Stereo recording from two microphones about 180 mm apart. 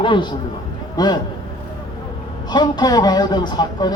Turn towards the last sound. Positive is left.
turn(degrees=25)  # may be behind; listen again after turning